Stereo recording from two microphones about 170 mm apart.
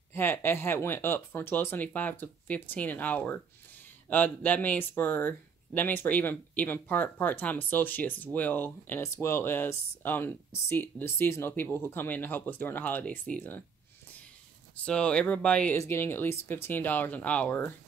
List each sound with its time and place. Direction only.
0.1 s speech: 15° left (ahead or behind)
14.9 s speech: 5° left (ahead or behind)